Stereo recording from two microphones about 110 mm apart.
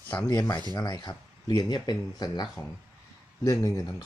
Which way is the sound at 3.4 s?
25° left (ahead or behind).